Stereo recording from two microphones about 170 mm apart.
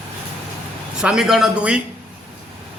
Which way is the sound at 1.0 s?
5° right (ahead or behind).